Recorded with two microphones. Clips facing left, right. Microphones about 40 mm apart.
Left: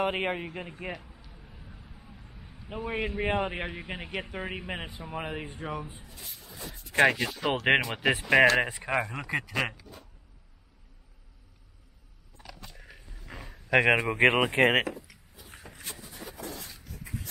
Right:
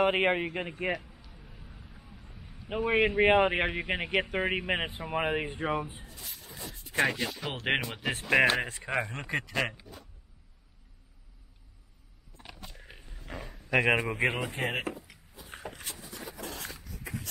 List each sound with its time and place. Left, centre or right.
0.0 s speech: centre
0.3 s speech: right
0.9 s a sound: centre
2.7 s speech: right
7.6 s speech: centre
8.9 s speech: centre
12.9 s roaring cats: centre
13.3 s a sound: centre
13.7 s a man's voice: left
14.2 s speech: left
15.7 s a sound: right
17.0 s shuffle: right